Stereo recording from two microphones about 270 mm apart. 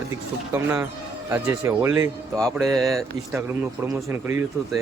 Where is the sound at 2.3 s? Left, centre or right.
Centre.